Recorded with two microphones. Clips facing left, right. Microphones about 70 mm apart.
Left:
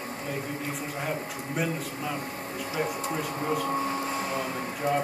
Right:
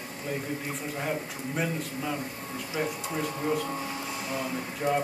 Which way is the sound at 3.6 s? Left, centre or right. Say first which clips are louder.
Left 5 dB; left.